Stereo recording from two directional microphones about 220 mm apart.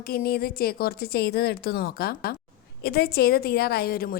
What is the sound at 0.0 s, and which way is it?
A woman's voice, 45° left (ahead or behind).